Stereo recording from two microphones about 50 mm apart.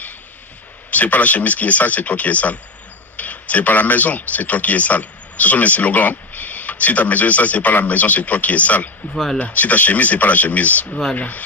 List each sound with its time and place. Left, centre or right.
0.8 s speech: left
9.1 s speech: centre
9.4 s speech: left